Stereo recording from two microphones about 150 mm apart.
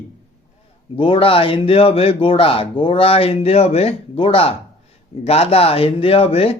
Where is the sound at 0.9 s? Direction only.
35° left (ahead or behind).